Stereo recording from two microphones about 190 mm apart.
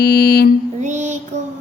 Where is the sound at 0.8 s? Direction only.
40° right (ahead or behind).